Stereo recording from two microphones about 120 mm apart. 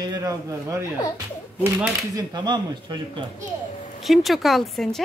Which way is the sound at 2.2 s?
35° right (ahead or behind).